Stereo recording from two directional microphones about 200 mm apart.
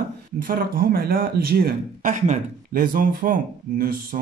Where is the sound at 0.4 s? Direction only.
45° right (ahead or behind).